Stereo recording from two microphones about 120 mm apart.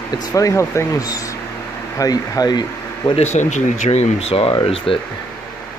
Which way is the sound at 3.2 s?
80° left.